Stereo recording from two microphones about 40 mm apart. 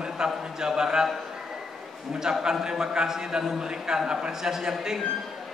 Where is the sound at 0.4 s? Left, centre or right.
Centre.